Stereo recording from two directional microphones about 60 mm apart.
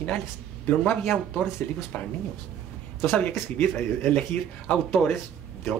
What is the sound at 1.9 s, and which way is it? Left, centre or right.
Speech, left.